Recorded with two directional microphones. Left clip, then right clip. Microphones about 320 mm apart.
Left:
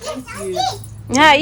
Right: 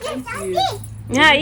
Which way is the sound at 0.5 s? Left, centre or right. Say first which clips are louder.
Even; centre.